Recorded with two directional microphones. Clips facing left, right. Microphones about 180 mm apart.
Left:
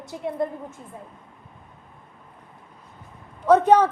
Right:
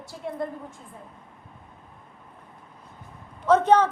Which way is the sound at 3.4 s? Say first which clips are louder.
Left 3 dB; 15° left (ahead or behind).